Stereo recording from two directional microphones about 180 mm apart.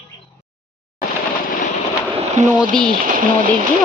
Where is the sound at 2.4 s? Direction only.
40° right (ahead or behind).